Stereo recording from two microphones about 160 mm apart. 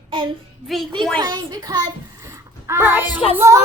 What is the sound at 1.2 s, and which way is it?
A child's voice, 25° right (ahead or behind).